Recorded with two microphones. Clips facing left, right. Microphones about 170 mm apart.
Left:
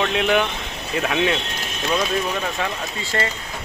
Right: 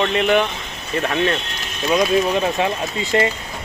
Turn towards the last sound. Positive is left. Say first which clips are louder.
# right 6 dB
turn(degrees=-20)  # may be behind; listen again after turning